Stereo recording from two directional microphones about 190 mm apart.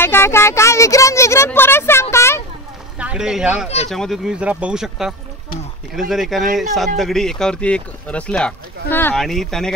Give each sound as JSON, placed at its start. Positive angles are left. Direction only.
{"t": 0.0, "sound": "a woman's voice", "side_deg": 10}
{"t": 3.0, "sound": "speech", "side_deg": -5}
{"t": 3.6, "sound": "speech", "side_deg": 35}
{"t": 3.9, "sound": "speech", "side_deg": 0}